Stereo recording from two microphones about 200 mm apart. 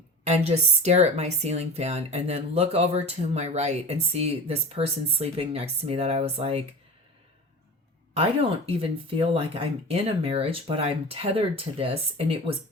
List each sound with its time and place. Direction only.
0.3 s a woman's voice: 35° right (ahead or behind)
8.2 s speech: 30° right (ahead or behind)